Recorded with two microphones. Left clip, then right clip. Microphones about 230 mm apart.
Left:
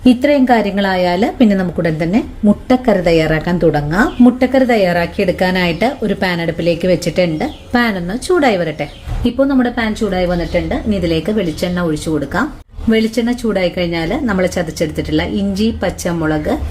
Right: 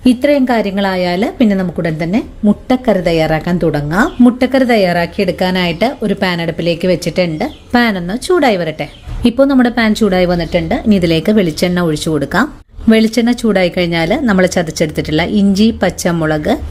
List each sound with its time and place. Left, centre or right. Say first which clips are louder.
0.0 s a woman's voice: even; centre
9.2 s a woman's voice: right 4 dB; right